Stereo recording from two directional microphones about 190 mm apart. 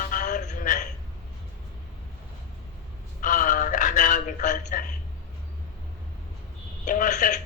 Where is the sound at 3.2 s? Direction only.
45° left (ahead or behind).